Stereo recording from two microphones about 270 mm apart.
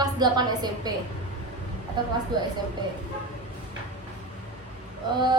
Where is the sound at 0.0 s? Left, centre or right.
Centre.